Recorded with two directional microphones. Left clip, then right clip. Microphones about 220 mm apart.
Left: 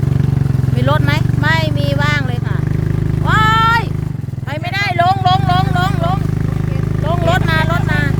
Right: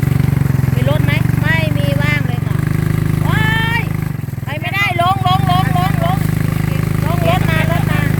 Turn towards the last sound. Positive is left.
turn(degrees=30)  # may be behind; listen again after turning